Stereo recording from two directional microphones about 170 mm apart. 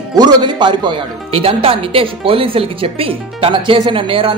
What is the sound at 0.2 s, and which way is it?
Speech, 25° right (ahead or behind).